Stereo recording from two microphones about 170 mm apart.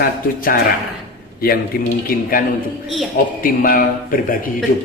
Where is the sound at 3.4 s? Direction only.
55° left (ahead or behind).